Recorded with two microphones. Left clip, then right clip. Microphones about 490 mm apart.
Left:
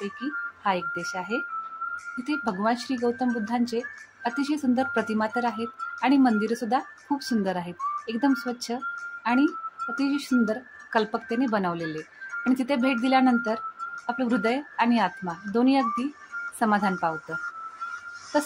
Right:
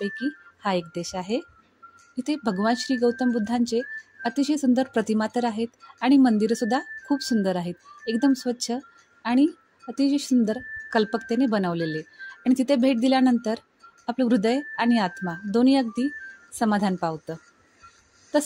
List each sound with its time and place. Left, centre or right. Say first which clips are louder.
0.0 s speech: right 1 dB; right